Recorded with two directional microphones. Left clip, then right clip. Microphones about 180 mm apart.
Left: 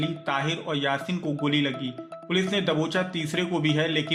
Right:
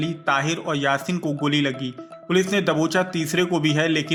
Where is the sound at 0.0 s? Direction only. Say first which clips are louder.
Right 5 dB; 30° right (ahead or behind).